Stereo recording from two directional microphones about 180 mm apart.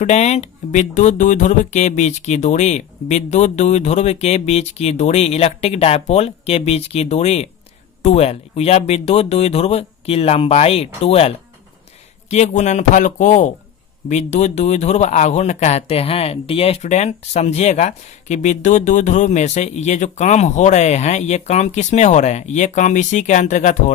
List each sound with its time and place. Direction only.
0.0 s speech: 40° left (ahead or behind)